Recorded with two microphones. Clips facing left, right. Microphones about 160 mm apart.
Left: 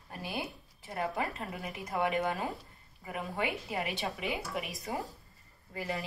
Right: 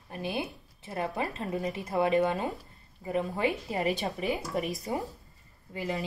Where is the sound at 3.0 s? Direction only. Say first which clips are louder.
Right 6 dB; 35° right (ahead or behind).